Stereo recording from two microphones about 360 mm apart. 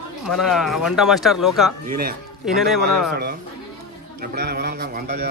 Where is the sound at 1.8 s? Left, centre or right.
Right.